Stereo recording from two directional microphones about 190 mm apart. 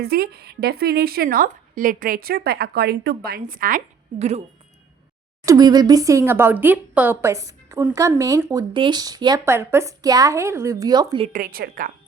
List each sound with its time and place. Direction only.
0.0 s a woman's voice: 55° right (ahead or behind); by 4.4 s 35° right (ahead or behind)
5.5 s a woman's voice: 20° right (ahead or behind)
11.3 s speech: 45° right (ahead or behind)